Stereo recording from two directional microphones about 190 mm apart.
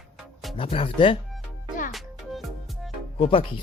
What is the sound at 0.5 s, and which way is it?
Speech, 30° left (ahead or behind).